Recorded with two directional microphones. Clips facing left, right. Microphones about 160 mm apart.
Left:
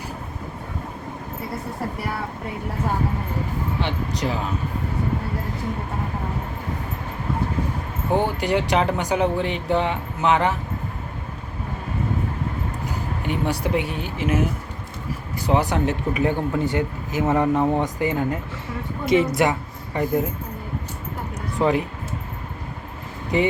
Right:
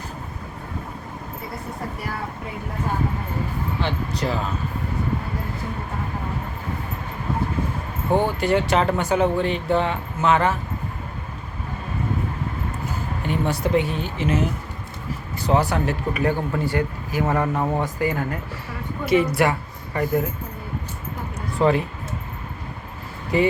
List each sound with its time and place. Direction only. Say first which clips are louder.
3.8 s speech: even; 15° left (ahead or behind)
8.4 s speech: right 1 dB; 15° left (ahead or behind)
13.2 s speech: right 1 dB; 15° left (ahead or behind)
15.4 s a woman's voice: even; 20° left (ahead or behind)
21.6 s speech: right 1 dB; 15° left (ahead or behind)
23.3 s speech: right 1 dB; 20° left (ahead or behind)